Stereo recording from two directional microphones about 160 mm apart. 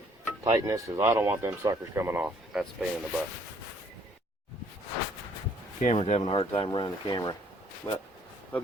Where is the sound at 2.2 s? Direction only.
5° right (ahead or behind).